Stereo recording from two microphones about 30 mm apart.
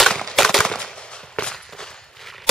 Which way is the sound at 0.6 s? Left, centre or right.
Centre.